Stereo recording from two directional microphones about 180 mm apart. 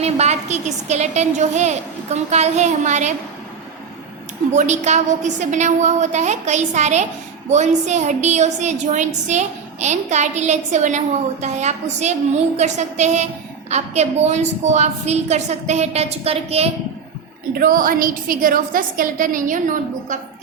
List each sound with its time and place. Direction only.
0.0 s a woman's voice: 35° right (ahead or behind)
4.5 s a woman's voice: 40° right (ahead or behind)
17.5 s a woman's voice: 55° right (ahead or behind)